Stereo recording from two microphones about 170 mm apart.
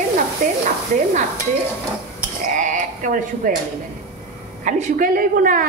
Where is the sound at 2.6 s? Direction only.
50° right (ahead or behind).